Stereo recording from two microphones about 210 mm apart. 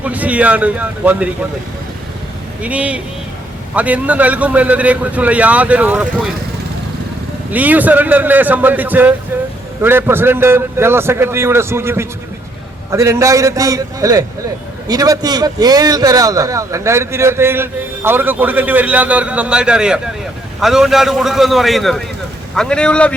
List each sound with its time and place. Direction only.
0.0 s a man's voice: 5° right (ahead or behind)
2.6 s a man's voice: 5° right (ahead or behind)
7.5 s a man's voice: 10° right (ahead or behind)